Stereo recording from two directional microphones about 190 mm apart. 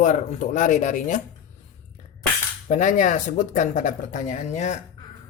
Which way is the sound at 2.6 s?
40° left (ahead or behind).